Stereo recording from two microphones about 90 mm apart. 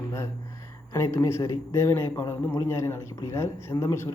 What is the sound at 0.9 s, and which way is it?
Speech, 30° left (ahead or behind).